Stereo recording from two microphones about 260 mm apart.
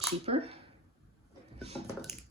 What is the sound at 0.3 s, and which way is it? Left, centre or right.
Speech, right.